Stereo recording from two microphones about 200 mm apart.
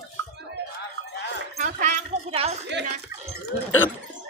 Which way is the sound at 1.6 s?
35° right (ahead or behind).